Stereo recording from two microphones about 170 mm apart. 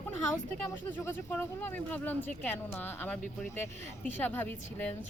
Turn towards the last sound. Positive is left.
turn(degrees=10)  # may be behind; listen again after turning